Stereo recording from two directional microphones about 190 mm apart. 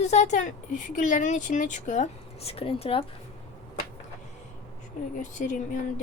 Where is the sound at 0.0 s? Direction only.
35° left (ahead or behind).